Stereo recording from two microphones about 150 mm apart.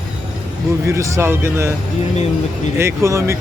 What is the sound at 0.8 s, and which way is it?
Speech, 20° right (ahead or behind).